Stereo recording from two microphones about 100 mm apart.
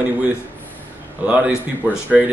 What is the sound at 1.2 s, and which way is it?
Speech, 10° right (ahead or behind).